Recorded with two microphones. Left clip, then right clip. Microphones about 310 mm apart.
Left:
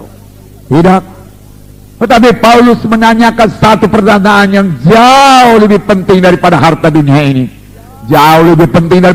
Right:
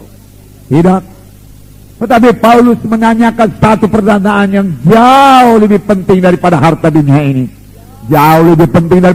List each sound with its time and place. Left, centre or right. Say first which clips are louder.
0.7 s a man's voice: left 3 dB; left